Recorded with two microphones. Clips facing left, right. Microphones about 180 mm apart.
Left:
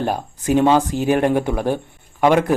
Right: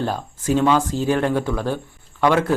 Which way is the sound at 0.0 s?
15° left (ahead or behind).